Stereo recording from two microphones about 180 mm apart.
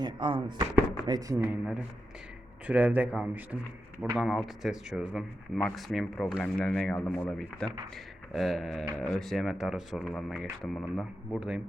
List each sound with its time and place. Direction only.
0.0 s speech: 25° right (ahead or behind)
2.6 s speech: 10° right (ahead or behind)
11.3 s speech: 5° right (ahead or behind)